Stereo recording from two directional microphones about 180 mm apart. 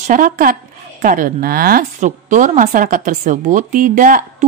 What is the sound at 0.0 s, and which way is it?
A woman's voice, 50° right (ahead or behind).